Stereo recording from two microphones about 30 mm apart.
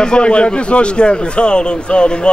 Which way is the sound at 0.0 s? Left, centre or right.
Left.